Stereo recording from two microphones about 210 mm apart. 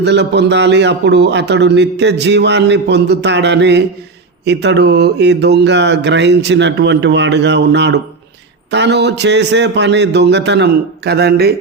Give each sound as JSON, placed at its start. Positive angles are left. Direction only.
{"t": 0.0, "sound": "a man's voice", "side_deg": -55}